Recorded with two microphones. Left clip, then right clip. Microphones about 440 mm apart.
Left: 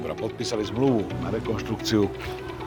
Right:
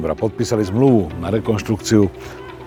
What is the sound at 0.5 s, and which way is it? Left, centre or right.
Speech, right.